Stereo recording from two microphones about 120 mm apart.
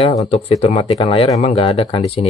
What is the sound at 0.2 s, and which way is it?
Speech, 60° left (ahead or behind).